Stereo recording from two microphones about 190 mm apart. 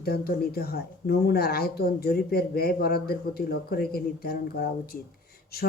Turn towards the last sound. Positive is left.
turn(degrees=55)  # may be behind; listen again after turning